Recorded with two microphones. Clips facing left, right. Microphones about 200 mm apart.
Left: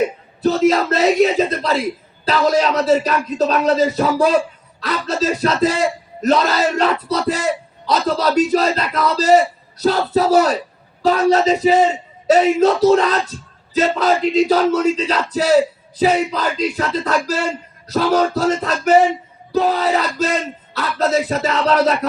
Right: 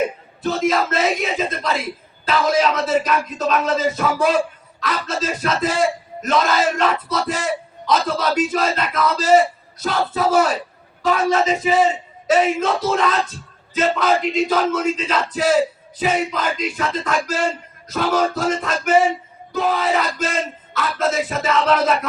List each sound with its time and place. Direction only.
0.4 s a man's voice: 40° left (ahead or behind)